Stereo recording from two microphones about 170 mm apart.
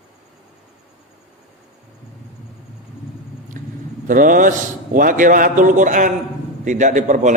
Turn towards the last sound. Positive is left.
turn(degrees=-45)  # may be behind; listen again after turning